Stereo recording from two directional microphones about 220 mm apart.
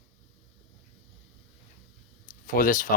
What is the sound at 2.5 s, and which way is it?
Speech, 40° left (ahead or behind).